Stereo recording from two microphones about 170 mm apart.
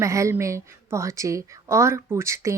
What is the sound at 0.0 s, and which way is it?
Speech, 15° right (ahead or behind).